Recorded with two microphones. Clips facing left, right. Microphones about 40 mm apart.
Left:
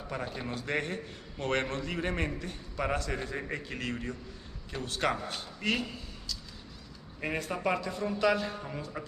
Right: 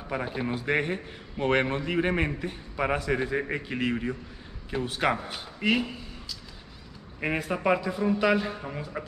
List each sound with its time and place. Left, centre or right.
0.1 s a man's voice: centre